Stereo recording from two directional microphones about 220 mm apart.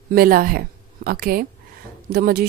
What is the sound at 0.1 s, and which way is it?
A woman's voice, 40° right (ahead or behind).